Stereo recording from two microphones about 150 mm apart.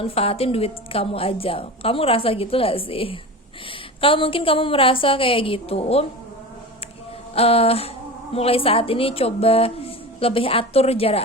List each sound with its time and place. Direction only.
0.0 s a woman's voice: 40° left (ahead or behind)
7.3 s a woman's voice: 40° left (ahead or behind)